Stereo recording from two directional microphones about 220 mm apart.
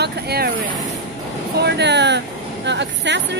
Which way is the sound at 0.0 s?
45° right (ahead or behind).